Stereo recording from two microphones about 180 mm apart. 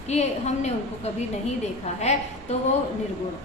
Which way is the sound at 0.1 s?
40° left (ahead or behind).